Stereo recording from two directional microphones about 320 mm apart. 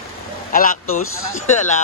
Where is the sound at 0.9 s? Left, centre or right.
Left.